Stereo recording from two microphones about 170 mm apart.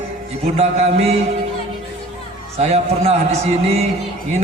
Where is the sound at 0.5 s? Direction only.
35° right (ahead or behind).